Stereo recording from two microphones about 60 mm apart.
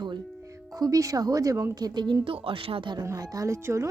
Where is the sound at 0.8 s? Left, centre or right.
Right.